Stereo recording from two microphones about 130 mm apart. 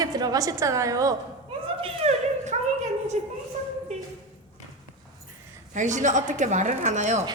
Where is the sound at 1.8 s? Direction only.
55° right (ahead or behind).